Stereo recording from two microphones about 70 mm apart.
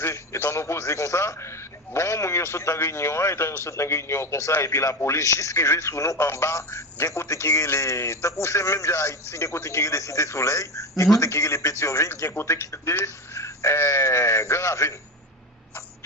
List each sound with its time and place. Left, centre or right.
0.0 s a man's voice: left